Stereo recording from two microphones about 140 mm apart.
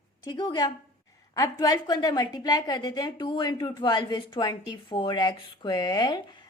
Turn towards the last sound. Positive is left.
turn(degrees=30)  # may be behind; listen again after turning